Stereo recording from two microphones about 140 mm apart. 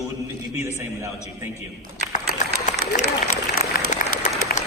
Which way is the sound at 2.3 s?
55° left (ahead or behind).